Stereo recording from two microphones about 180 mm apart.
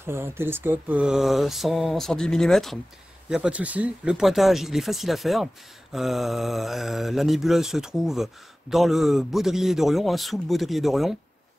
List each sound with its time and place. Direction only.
0.0 s speech: 15° right (ahead or behind)